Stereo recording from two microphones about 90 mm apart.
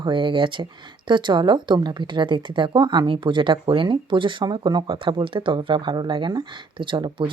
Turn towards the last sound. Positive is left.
turn(degrees=-65)  # may be behind; listen again after turning